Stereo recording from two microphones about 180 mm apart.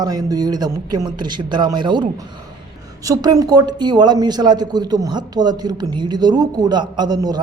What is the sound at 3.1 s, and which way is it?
Speech, 20° right (ahead or behind).